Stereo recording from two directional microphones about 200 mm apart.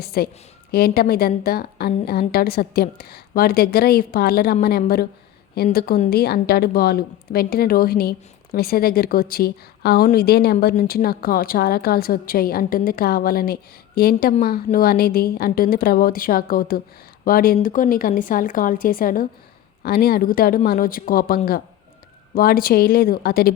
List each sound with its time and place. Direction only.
0.0 s a woman's voice: 50° left (ahead or behind)
5.7 s a woman's voice: 50° left (ahead or behind)